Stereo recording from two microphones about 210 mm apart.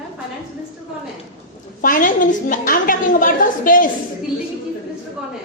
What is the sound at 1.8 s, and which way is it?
A woman's voice, 40° left (ahead or behind).